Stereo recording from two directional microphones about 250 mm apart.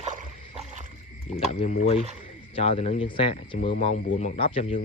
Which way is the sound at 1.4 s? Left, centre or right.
Left.